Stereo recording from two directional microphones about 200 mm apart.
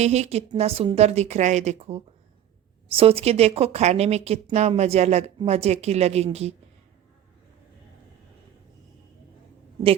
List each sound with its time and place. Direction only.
0.0 s a woman's voice: 35° right (ahead or behind)